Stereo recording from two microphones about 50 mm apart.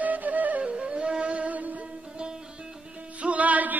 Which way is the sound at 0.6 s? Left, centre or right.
Right.